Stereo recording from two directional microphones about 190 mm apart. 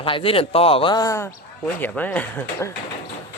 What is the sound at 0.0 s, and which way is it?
Speech, 30° left (ahead or behind).